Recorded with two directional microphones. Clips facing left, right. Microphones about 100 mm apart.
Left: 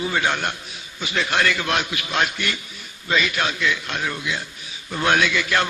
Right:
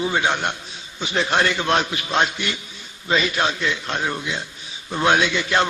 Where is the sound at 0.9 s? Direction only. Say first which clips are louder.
Right 2 dB; 30° right (ahead or behind).